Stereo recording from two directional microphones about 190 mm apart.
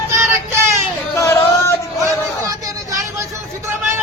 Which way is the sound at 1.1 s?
15° left (ahead or behind).